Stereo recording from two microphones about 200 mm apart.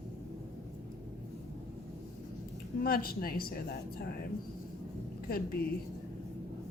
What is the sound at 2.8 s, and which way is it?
Speech, 45° left (ahead or behind).